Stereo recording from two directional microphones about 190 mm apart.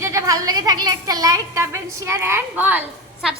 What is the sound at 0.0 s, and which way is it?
A woman's voice, 15° right (ahead or behind).